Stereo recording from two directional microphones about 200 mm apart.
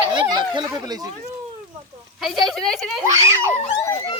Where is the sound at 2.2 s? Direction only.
Centre (ahead or behind).